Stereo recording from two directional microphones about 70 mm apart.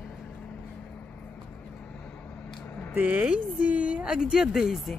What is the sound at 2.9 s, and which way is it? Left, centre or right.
A woman's voice, right.